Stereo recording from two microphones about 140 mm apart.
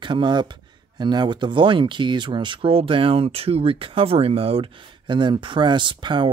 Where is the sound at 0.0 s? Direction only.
35° right (ahead or behind).